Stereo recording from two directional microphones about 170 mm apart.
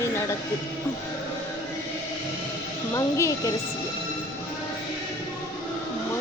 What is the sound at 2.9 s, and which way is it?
Speech, 20° left (ahead or behind).